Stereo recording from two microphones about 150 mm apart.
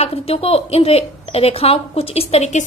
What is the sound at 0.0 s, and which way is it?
A woman's voice, 40° left (ahead or behind).